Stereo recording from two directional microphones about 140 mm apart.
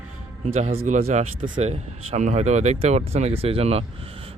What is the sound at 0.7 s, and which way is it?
Speech, 75° right (ahead or behind).